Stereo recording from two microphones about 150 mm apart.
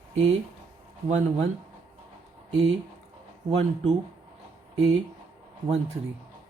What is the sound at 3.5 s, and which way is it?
Speech, 45° right (ahead or behind).